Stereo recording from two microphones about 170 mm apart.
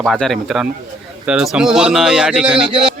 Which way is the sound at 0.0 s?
Centre (ahead or behind).